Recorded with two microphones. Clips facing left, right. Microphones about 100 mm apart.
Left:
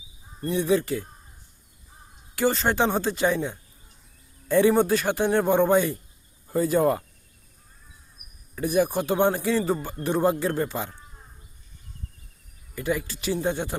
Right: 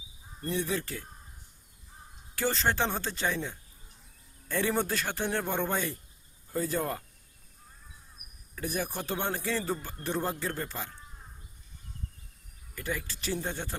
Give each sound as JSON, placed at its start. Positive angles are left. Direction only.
{"t": 0.4, "sound": "speech", "side_deg": 15}
{"t": 2.3, "sound": "speech", "side_deg": 10}
{"t": 8.5, "sound": "speech", "side_deg": 15}
{"t": 12.7, "sound": "speech", "side_deg": 15}